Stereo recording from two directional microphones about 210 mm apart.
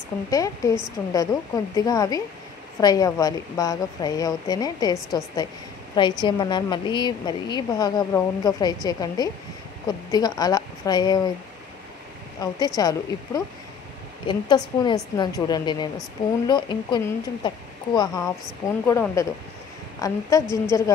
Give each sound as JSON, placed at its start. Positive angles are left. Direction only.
{"t": 0.3, "sound": "a woman's voice", "side_deg": 15}
{"t": 12.4, "sound": "a woman's voice", "side_deg": 20}